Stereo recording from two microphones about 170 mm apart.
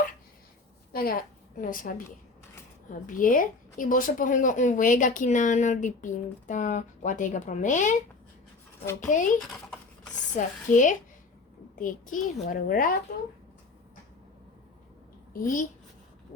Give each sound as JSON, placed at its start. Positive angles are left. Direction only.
{"t": 0.9, "sound": "a woman's voice", "side_deg": 60}
{"t": 9.0, "sound": "a woman's voice", "side_deg": 50}
{"t": 10.3, "sound": "a woman's voice", "side_deg": 50}
{"t": 15.3, "sound": "a child's voice", "side_deg": 55}